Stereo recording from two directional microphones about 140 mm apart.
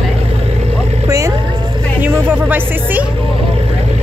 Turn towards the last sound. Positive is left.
turn(degrees=-15)  # may be behind; listen again after turning